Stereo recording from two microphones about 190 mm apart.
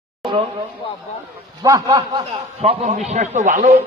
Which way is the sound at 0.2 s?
25° right (ahead or behind).